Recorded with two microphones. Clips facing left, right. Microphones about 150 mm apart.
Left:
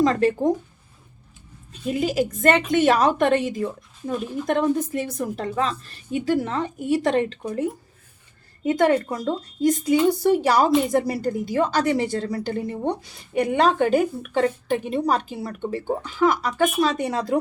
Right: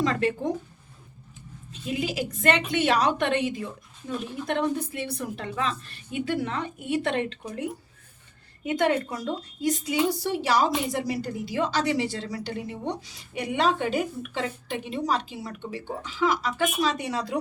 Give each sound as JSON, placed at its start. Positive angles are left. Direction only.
{"t": 0.0, "sound": "a woman's voice", "side_deg": 40}
{"t": 1.9, "sound": "a woman's voice", "side_deg": 45}
{"t": 8.6, "sound": "speech", "side_deg": 40}